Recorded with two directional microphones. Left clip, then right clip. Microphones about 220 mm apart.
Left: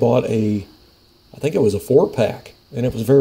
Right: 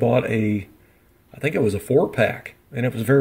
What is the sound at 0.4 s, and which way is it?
Speech, 25° right (ahead or behind).